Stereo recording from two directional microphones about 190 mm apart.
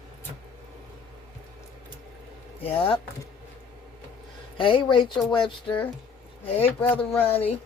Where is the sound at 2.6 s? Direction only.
30° left (ahead or behind).